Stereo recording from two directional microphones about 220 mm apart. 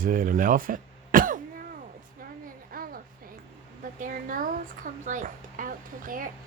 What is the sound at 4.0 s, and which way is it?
Speech, 35° right (ahead or behind).